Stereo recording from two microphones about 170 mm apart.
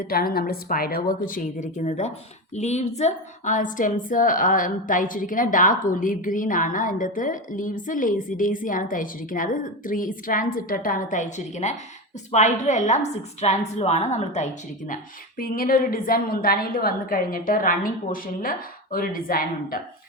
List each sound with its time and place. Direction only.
0.0 s a woman's voice: 60° left (ahead or behind); by 14.9 s 45° left (ahead or behind)
15.4 s a woman's voice: 55° left (ahead or behind)